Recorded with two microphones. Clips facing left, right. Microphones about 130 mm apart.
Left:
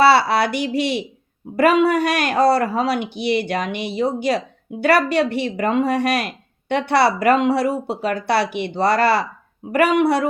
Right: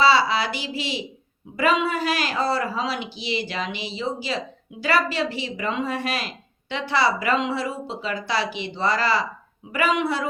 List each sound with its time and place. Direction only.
0.0 s speech: 60° left (ahead or behind)